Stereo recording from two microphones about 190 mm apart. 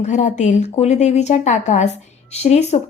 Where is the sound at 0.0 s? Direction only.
40° left (ahead or behind).